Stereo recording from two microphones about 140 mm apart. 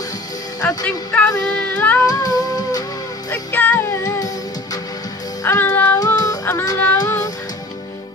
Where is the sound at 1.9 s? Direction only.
25° left (ahead or behind).